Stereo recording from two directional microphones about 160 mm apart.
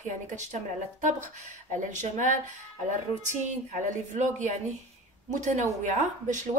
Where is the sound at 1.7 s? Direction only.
50° right (ahead or behind).